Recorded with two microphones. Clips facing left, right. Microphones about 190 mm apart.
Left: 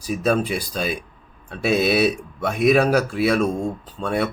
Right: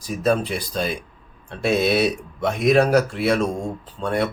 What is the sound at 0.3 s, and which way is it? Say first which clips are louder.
Speech: even; 5° left (ahead or behind).